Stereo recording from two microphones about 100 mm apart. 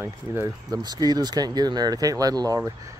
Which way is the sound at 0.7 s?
40° right (ahead or behind).